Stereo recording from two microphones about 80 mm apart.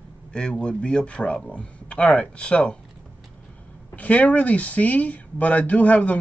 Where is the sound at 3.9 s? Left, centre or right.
Centre.